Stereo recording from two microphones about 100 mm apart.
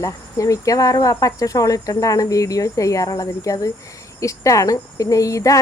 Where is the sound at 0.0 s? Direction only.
35° left (ahead or behind).